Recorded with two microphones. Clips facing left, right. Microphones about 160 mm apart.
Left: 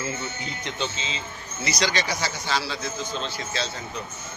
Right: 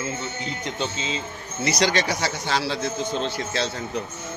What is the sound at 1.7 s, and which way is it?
Speech, 60° right (ahead or behind).